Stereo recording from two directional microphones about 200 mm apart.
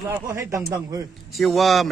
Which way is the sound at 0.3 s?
15° right (ahead or behind).